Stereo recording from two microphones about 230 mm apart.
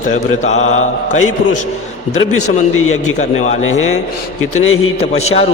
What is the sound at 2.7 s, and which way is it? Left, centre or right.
Speech, left.